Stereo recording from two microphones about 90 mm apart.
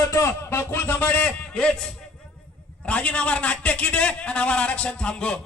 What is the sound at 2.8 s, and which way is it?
A man's voice, 15° left (ahead or behind).